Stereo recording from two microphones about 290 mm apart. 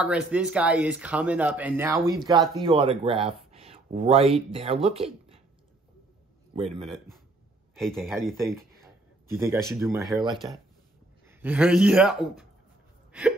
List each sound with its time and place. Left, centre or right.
0.0 s speech: centre
6.8 s speech: centre